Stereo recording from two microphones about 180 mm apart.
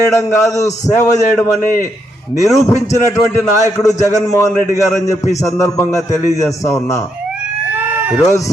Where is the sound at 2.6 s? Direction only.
15° left (ahead or behind).